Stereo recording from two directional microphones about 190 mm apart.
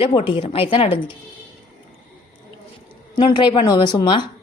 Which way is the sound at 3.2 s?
25° left (ahead or behind).